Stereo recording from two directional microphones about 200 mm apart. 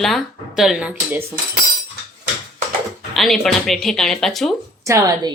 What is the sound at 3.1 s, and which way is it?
Speech, centre (ahead or behind).